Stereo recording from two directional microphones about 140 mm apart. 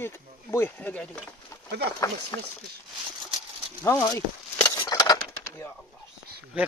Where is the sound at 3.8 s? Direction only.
20° left (ahead or behind).